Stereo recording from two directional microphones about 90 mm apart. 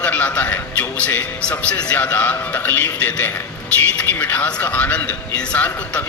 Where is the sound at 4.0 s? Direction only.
20° left (ahead or behind).